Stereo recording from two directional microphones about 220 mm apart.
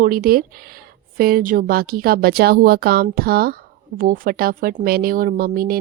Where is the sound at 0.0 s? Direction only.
40° right (ahead or behind).